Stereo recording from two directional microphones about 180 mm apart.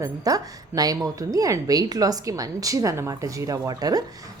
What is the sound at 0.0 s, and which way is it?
A woman's voice, 20° right (ahead or behind).